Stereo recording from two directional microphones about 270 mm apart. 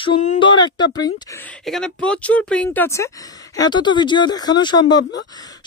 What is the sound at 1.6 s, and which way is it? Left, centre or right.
Speech, centre.